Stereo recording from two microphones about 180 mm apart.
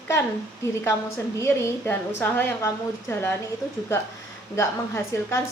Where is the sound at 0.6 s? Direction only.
15° left (ahead or behind).